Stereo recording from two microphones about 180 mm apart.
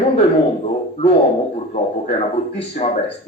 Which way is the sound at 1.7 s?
30° left (ahead or behind).